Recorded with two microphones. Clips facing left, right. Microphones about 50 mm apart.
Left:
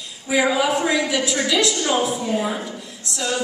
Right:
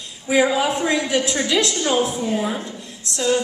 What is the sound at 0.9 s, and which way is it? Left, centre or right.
Speech, right.